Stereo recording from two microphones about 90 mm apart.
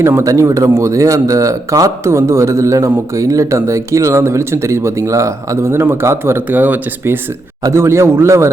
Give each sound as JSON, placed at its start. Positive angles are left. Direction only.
{"t": 0.0, "sound": "speech", "side_deg": -30}